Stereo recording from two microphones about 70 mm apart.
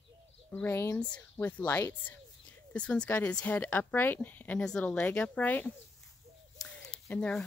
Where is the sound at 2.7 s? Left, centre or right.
Centre.